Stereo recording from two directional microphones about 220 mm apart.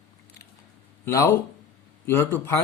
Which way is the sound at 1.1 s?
15° left (ahead or behind).